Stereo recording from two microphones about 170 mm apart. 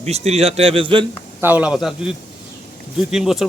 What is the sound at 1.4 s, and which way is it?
Speech, 10° right (ahead or behind).